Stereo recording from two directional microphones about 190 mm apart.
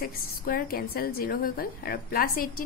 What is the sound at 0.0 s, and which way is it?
A woman's voice, 50° left (ahead or behind).